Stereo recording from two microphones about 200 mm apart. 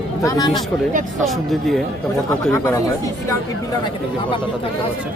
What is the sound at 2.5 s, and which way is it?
Speech, 15° left (ahead or behind).